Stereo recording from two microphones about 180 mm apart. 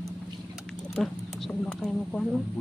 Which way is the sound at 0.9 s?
Centre (ahead or behind).